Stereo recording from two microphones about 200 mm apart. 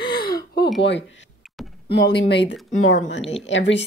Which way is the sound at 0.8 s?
60° left (ahead or behind).